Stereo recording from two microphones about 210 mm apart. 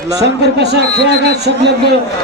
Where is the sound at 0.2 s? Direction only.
50° right (ahead or behind).